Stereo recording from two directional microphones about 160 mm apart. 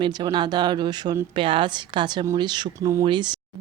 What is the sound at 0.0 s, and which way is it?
A woman's voice, 30° right (ahead or behind).